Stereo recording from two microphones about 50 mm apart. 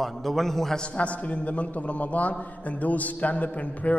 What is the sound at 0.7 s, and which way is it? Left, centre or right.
A man's voice, left.